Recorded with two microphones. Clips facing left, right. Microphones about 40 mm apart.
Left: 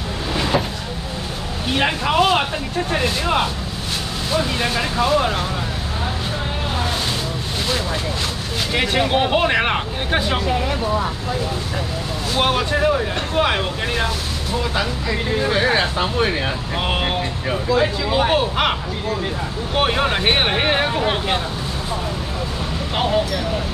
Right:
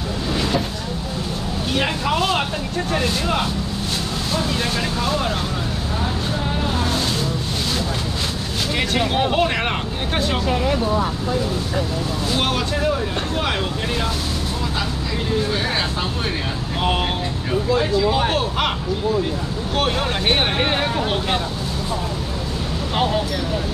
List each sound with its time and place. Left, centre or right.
1.7 s speech: centre
8.7 s speech: centre
12.4 s speech: centre
15.4 s speech: left
17.7 s speech: centre
19.7 s speech: centre